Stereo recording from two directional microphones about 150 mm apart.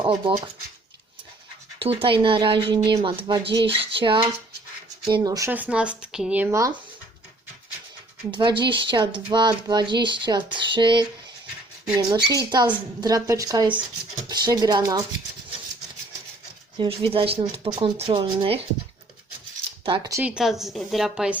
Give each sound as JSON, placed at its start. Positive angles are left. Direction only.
{"t": 0.0, "sound": "speech", "side_deg": -30}
{"t": 1.8, "sound": "speech", "side_deg": -40}
{"t": 5.0, "sound": "a woman's voice", "side_deg": -25}
{"t": 5.5, "sound": "speech", "side_deg": -10}
{"t": 8.3, "sound": "a woman's voice", "side_deg": -30}
{"t": 16.7, "sound": "speech", "side_deg": -35}
{"t": 19.8, "sound": "speech", "side_deg": -35}
{"t": 20.2, "sound": "a woman's voice", "side_deg": -5}